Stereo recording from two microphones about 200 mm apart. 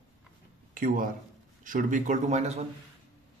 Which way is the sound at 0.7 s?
45° right (ahead or behind).